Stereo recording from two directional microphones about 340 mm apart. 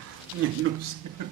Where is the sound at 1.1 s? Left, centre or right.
Right.